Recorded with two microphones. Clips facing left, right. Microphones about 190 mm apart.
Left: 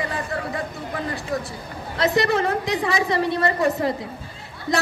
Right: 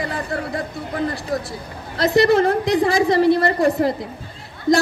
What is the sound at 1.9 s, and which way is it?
A woman's voice, 35° right (ahead or behind).